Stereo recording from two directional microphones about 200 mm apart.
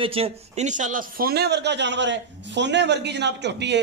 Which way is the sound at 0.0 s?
30° right (ahead or behind).